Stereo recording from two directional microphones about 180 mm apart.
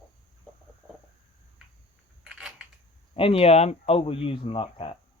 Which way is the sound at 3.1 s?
30° left (ahead or behind).